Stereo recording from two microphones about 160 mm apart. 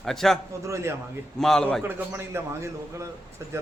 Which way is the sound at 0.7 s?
15° right (ahead or behind).